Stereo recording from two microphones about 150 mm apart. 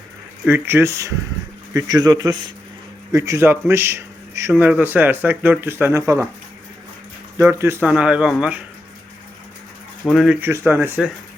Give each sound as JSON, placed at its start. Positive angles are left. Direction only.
{"t": 0.4, "sound": "a man's voice", "side_deg": -15}
{"t": 7.3, "sound": "speech", "side_deg": -20}
{"t": 10.0, "sound": "speech", "side_deg": 0}
{"t": 10.5, "sound": "speech", "side_deg": -15}